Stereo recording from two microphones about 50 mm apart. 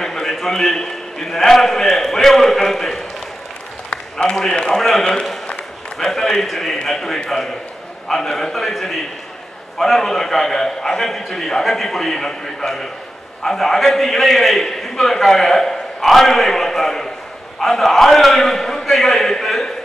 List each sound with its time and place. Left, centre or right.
0.0 s a man's voice: centre
3.9 s a sound: centre
4.5 s a man's voice: centre